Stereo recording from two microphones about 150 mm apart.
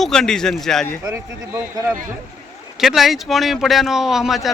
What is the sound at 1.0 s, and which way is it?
Speech, 15° right (ahead or behind).